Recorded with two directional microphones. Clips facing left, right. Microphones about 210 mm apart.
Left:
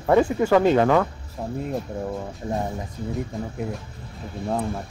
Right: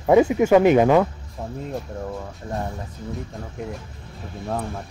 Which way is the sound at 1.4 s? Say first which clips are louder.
Left 2 dB; 5° left (ahead or behind).